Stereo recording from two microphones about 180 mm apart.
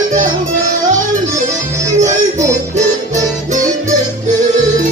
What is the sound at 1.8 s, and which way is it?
Music, 40° right (ahead or behind).